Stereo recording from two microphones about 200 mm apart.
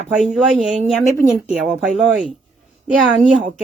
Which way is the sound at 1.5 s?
Centre (ahead or behind).